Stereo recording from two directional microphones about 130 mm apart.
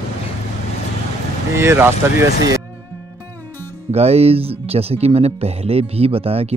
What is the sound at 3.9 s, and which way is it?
Speech, 50° right (ahead or behind).